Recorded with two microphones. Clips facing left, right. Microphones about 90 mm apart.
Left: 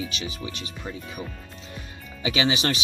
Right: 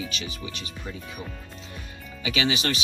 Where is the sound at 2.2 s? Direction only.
30° left (ahead or behind).